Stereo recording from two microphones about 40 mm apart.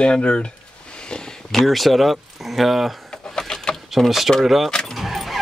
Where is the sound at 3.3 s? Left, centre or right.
Centre.